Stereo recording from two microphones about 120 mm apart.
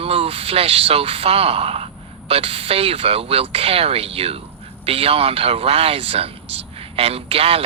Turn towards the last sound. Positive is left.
turn(degrees=-55)  # may be behind; listen again after turning